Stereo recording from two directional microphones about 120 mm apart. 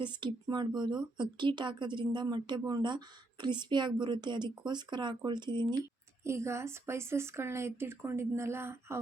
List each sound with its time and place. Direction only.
0.0 s speech: 40° right (ahead or behind)
6.2 s speech: 25° right (ahead or behind)